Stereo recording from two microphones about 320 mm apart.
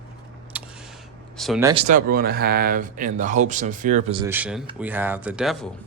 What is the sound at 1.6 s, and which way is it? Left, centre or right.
Speech, centre.